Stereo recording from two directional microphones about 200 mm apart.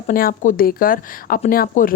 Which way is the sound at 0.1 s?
45° left (ahead or behind).